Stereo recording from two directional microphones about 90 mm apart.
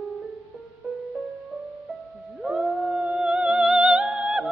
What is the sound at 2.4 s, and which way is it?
Music, 10° right (ahead or behind).